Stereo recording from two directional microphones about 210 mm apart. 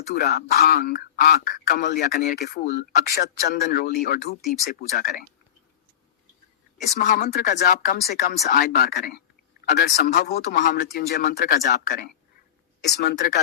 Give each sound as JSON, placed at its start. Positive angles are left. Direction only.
{"t": 0.1, "sound": "speech", "side_deg": 50}
{"t": 4.4, "sound": "speech", "side_deg": 0}
{"t": 4.9, "sound": "speech", "side_deg": 45}
{"t": 7.0, "sound": "speech", "side_deg": 40}